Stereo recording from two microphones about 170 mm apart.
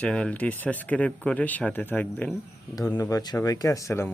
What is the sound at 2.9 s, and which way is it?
Speech, 20° left (ahead or behind).